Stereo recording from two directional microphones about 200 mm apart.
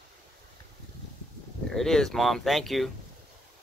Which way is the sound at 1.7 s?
Centre (ahead or behind).